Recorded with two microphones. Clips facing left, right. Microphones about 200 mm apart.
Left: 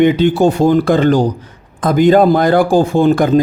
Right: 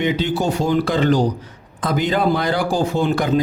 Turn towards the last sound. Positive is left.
turn(degrees=50)  # may be behind; listen again after turning